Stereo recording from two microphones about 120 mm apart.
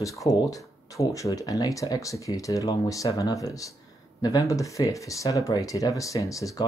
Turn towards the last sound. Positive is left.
turn(degrees=25)  # may be behind; listen again after turning